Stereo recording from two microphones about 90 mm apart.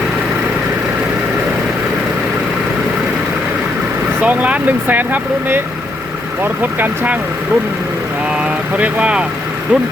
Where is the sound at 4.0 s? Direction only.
20° right (ahead or behind).